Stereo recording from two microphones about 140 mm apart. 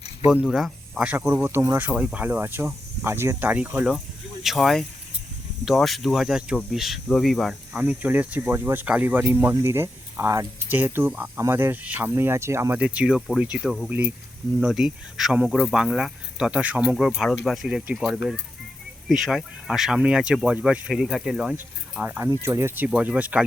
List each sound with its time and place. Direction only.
0.3 s speech: 5° right (ahead or behind)
7.8 s speech: 10° right (ahead or behind)
22.0 s speech: 15° right (ahead or behind)